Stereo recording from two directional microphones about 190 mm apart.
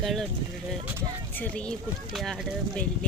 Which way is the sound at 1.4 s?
5° left (ahead or behind).